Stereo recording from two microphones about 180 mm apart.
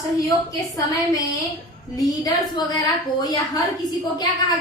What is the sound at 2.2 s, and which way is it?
A woman's voice, 20° left (ahead or behind).